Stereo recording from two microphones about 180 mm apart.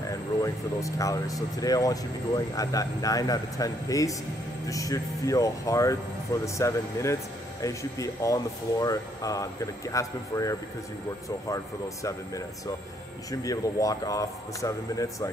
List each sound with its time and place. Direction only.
0.4 s speech: 15° left (ahead or behind)